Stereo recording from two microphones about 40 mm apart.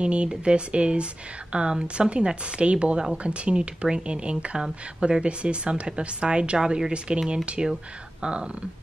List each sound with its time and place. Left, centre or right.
0.0 s speech: right